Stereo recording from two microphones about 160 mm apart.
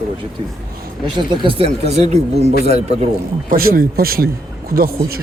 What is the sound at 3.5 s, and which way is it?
Speech, 60° right (ahead or behind).